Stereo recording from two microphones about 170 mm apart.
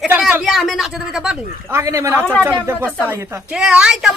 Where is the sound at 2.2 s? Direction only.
10° left (ahead or behind).